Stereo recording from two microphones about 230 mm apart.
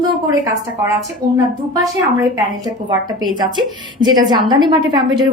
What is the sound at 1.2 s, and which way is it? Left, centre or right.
A woman's voice, centre.